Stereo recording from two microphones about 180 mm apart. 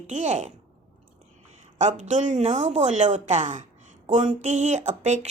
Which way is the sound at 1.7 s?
40° right (ahead or behind).